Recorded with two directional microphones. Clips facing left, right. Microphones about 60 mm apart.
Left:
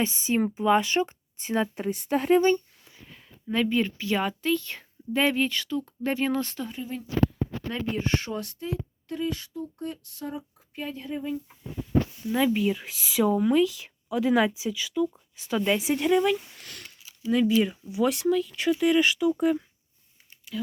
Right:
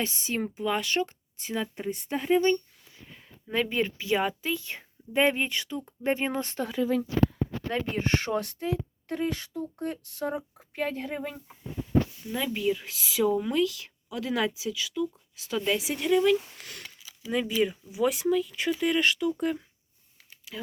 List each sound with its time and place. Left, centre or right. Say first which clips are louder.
0.0 s a woman's voice: left 5 dB; centre
1.7 s speech: left 5 dB; left
3.5 s speech: left 2 dB; right
3.9 s speech: even; centre
7.7 s speech: even; right
9.7 s a sound: right 2 dB; right
10.8 s speech: right 2 dB; right
12.3 s a woman's voice: left 5 dB; centre
17.2 s speech: left 4 dB; centre